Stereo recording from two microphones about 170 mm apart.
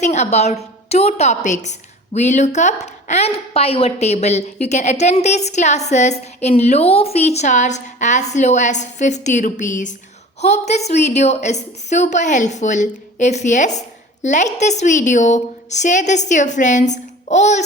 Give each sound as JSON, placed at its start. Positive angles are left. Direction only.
{"t": 0.0, "sound": "a woman's voice", "side_deg": 40}